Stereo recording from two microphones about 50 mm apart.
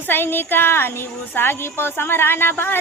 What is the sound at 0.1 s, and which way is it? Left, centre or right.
Speech, left.